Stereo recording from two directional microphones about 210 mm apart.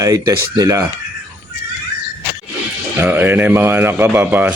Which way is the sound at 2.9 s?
10° right (ahead or behind).